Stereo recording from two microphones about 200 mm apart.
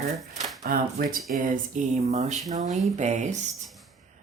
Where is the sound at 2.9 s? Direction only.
35° right (ahead or behind).